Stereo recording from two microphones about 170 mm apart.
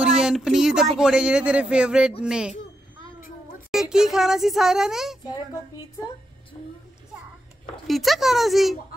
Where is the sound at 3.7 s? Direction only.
5° right (ahead or behind).